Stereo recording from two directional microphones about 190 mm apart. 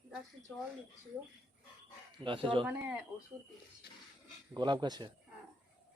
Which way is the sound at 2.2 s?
25° right (ahead or behind).